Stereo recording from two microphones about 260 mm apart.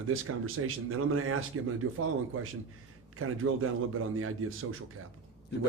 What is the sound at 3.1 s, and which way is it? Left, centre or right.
A man's voice, right.